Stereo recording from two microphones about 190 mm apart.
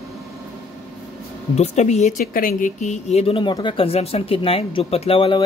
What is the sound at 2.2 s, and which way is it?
Speech, 50° left (ahead or behind).